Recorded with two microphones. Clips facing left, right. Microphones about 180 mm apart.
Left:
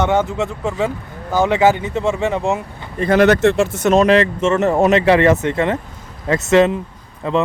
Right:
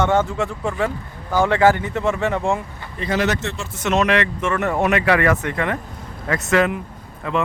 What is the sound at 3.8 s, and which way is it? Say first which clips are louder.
Speech: left 5 dB; 30° left (ahead or behind).